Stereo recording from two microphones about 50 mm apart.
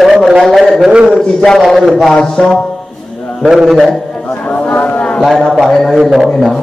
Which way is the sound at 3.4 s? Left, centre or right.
Centre.